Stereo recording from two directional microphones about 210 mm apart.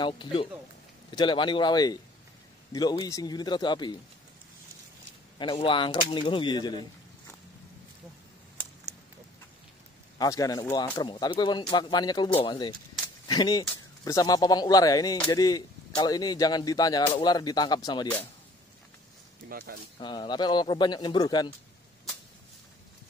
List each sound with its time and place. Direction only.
0.0 s speech: 25° left (ahead or behind)
5.4 s speech: 25° left (ahead or behind)
10.1 s speech: 15° left (ahead or behind)
20.0 s speech: 20° left (ahead or behind)